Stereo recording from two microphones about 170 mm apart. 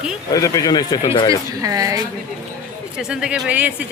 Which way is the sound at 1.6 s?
20° right (ahead or behind).